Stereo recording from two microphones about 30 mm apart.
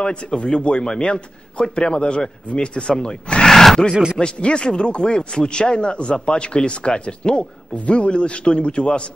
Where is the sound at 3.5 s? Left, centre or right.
Centre.